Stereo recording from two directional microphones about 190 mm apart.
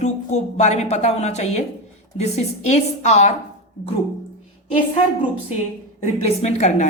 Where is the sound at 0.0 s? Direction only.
35° left (ahead or behind).